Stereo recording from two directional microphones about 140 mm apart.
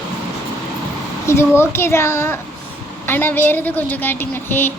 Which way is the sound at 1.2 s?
20° left (ahead or behind).